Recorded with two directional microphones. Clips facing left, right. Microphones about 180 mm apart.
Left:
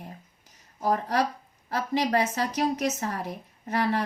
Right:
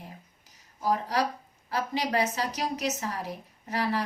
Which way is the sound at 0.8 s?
50° left (ahead or behind).